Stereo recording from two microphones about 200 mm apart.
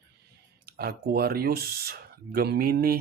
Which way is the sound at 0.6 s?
50° right (ahead or behind).